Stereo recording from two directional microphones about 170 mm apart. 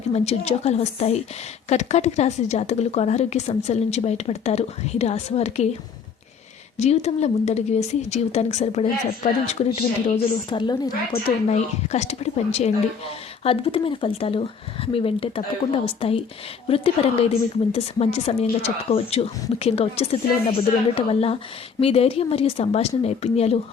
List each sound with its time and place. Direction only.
0.1 s a woman's voice: 40° left (ahead or behind)
6.7 s a woman's voice: 40° left (ahead or behind)
10.5 s a woman's voice: 25° left (ahead or behind)
11.4 s a woman's voice: 40° left (ahead or behind)